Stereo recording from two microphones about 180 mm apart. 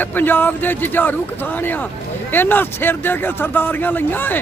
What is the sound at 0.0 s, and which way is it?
A man's voice, 10° left (ahead or behind).